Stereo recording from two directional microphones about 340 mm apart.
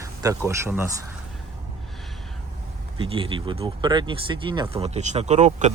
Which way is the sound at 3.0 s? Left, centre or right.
Centre.